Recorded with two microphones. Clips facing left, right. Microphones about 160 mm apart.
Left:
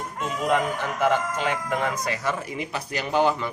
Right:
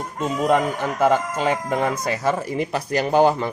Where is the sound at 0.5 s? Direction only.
35° right (ahead or behind).